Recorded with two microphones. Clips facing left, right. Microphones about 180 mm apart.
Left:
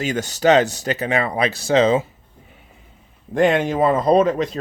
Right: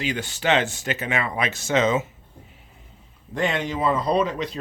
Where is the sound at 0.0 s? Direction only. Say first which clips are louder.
Left 7 dB; 45° left (ahead or behind).